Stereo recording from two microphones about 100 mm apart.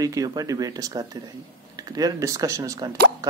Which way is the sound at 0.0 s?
35° right (ahead or behind).